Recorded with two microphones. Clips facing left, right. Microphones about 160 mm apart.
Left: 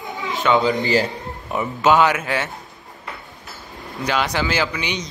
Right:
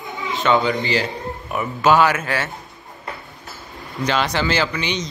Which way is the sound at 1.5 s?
20° left (ahead or behind).